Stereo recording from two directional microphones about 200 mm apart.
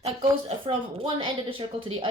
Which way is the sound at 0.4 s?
25° right (ahead or behind).